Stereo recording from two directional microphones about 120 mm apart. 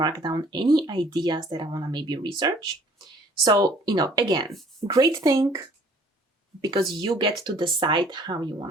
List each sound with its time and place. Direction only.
0.0 s speech: 35° right (ahead or behind)